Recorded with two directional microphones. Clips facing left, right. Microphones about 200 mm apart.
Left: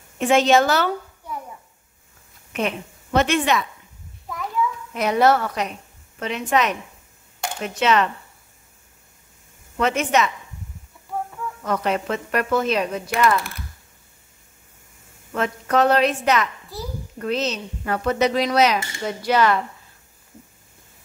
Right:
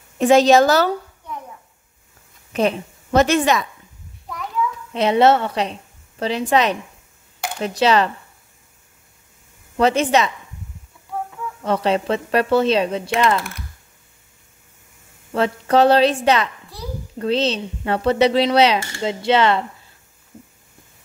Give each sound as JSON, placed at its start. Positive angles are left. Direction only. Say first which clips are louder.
{"t": 0.2, "sound": "a woman's voice", "louder": "right 4 dB", "side_deg": -35}
{"t": 2.5, "sound": "a woman's voice", "louder": "right 6 dB", "side_deg": -40}
{"t": 4.3, "sound": "a sound", "louder": "even", "side_deg": 0}
{"t": 4.9, "sound": "a woman's voice", "louder": "right 3 dB", "side_deg": -25}
{"t": 9.8, "sound": "a woman's voice", "louder": "right 4 dB", "side_deg": -30}
{"t": 11.6, "sound": "speech", "louder": "right 4 dB", "side_deg": -30}
{"t": 15.3, "sound": "a woman's voice", "louder": "right 4 dB", "side_deg": -30}
{"t": 16.7, "sound": "a child's voice", "louder": "left 2 dB", "side_deg": 0}
{"t": 17.2, "sound": "speech", "louder": "right 4 dB", "side_deg": -30}